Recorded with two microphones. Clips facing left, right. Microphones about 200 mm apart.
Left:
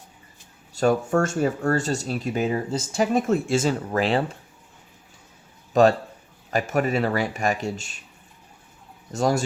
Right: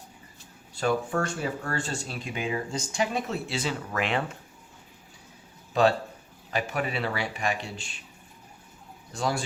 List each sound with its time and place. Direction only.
0.7 s speech: 40° left (ahead or behind)
5.7 s speech: 45° left (ahead or behind)
9.1 s speech: 40° left (ahead or behind)